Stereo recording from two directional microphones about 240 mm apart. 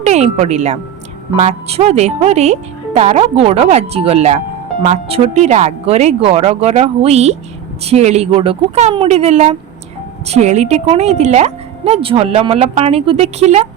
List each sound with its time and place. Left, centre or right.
0.0 s a woman's voice: right